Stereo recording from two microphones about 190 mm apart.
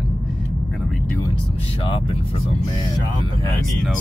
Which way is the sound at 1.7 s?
25° left (ahead or behind).